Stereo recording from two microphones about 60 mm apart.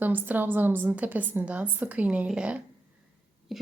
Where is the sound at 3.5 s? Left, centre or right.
Centre.